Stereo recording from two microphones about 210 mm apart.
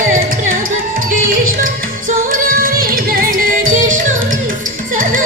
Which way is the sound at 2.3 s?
45° right (ahead or behind).